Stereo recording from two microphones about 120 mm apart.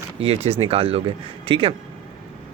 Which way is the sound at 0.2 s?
55° right (ahead or behind).